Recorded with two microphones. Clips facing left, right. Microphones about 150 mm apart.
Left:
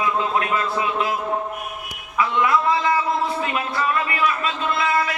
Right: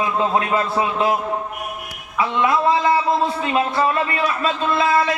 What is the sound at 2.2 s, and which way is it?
A man's voice, 30° right (ahead or behind).